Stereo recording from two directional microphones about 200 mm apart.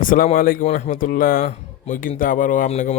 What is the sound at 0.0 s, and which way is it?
Speech, 40° left (ahead or behind).